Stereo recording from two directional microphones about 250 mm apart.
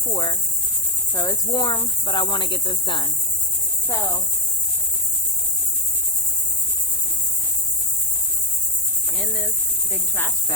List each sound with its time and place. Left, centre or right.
0.1 s speech: centre
9.1 s speech: centre